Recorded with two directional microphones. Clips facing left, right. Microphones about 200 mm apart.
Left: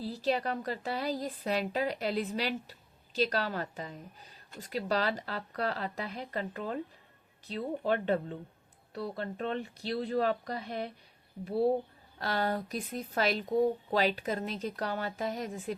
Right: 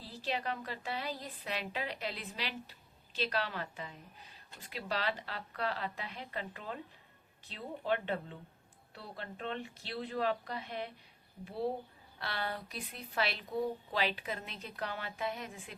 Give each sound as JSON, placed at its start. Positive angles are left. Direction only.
{"t": 0.0, "sound": "a woman's voice", "side_deg": 40}
{"t": 12.2, "sound": "a woman's voice", "side_deg": 40}